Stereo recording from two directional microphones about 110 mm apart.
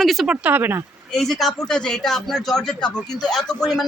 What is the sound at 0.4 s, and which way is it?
Speech, 20° right (ahead or behind).